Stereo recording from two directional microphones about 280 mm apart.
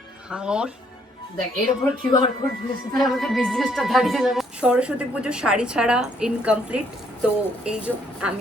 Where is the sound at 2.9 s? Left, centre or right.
Centre.